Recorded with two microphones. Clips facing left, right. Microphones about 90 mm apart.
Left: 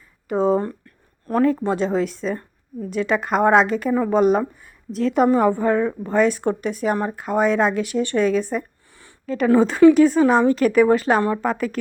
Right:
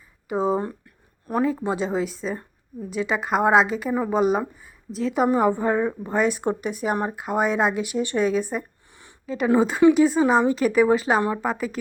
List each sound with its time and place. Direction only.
0.3 s a woman's voice: 5° right (ahead or behind)
5.3 s a woman's voice: 15° right (ahead or behind)
9.0 s a sound: 20° right (ahead or behind)
9.6 s a woman's voice: 5° right (ahead or behind)
11.2 s a woman's voice: 15° right (ahead or behind)
11.4 s a woman's voice: 5° right (ahead or behind)